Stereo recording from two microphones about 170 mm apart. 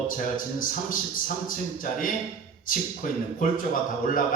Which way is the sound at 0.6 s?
55° left (ahead or behind).